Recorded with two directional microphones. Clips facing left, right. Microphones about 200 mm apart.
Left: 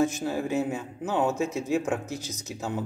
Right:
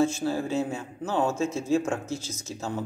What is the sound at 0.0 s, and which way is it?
A man's voice, 15° left (ahead or behind).